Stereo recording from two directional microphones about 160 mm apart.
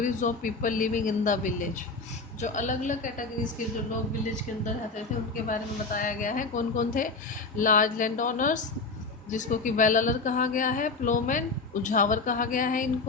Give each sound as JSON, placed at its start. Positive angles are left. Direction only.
{"t": 0.0, "sound": "a woman's voice", "side_deg": 55}
{"t": 5.5, "sound": "a woman's voice", "side_deg": 55}